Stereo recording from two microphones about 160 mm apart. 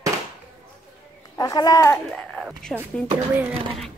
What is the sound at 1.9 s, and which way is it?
Speech, 5° left (ahead or behind).